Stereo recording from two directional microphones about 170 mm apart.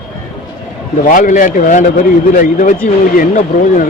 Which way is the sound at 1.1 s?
50° left (ahead or behind).